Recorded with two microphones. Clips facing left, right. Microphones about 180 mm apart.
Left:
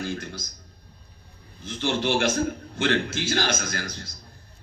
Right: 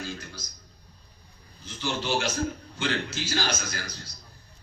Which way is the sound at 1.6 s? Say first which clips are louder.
Left 5 dB; 55° left (ahead or behind).